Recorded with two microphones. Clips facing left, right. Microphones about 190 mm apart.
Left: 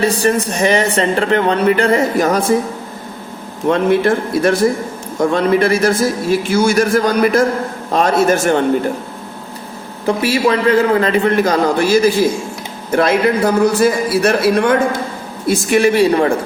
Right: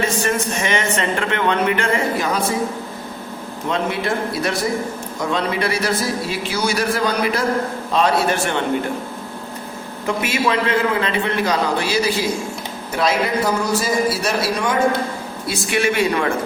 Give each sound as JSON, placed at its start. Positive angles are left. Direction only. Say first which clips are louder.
{"t": 0.0, "sound": "speech", "louder": "left 6 dB", "side_deg": 35}
{"t": 3.7, "sound": "a man's voice", "louder": "left 9 dB", "side_deg": 50}
{"t": 10.1, "sound": "a man's voice", "louder": "left 6 dB", "side_deg": 35}
{"t": 15.4, "sound": "speech", "louder": "left 8 dB", "side_deg": 45}